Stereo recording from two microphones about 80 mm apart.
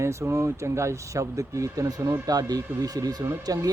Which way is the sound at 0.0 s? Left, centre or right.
Right.